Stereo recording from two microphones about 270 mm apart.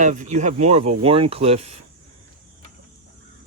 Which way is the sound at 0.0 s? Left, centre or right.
Right.